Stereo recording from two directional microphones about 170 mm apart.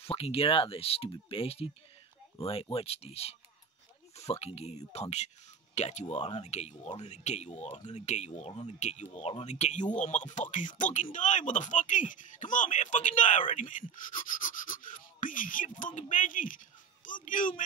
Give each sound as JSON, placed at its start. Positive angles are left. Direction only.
{"t": 0.0, "sound": "speech", "side_deg": 35}